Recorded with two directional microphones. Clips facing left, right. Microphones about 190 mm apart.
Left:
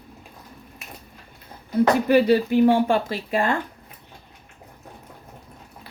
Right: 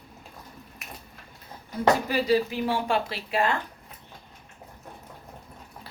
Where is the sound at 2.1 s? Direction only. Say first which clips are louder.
Left 7 dB; 60° left (ahead or behind).